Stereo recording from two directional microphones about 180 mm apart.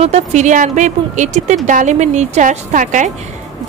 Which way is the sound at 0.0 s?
40° right (ahead or behind).